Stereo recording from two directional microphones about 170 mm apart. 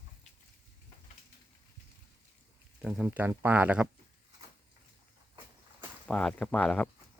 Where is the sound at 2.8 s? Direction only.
Centre (ahead or behind).